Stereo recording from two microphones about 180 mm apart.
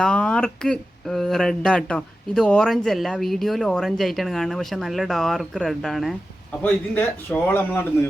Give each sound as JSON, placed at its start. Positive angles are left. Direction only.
{"t": 0.0, "sound": "a man's voice", "side_deg": 5}